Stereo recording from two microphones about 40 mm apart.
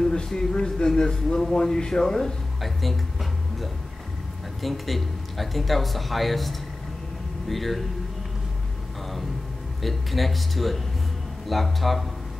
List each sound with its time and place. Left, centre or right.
0.0 s a sound: centre
1.4 s speech: centre
2.6 s music: centre
4.6 s speech: centre
9.8 s speech: centre